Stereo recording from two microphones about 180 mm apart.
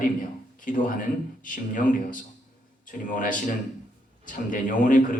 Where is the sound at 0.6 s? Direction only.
50° left (ahead or behind).